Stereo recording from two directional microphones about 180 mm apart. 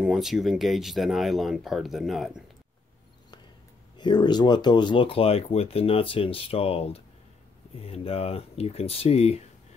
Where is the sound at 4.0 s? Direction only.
25° left (ahead or behind).